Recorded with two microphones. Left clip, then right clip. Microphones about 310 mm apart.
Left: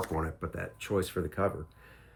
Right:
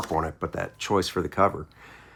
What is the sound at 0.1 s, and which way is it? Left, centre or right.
Speech, centre.